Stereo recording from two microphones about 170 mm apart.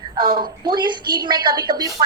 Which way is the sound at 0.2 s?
30° right (ahead or behind).